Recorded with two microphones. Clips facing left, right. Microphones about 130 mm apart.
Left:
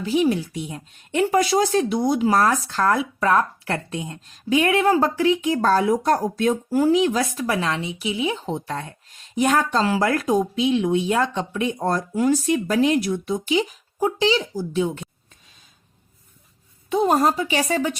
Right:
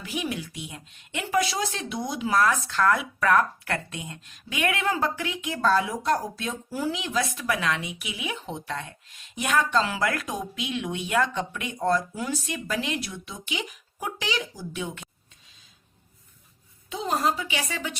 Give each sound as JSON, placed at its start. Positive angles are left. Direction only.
{"t": 0.0, "sound": "speech", "side_deg": 35}
{"t": 16.9, "sound": "speech", "side_deg": 50}